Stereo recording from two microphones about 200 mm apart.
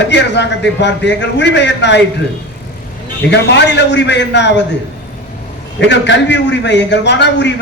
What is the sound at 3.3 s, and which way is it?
A man's voice, 60° left (ahead or behind).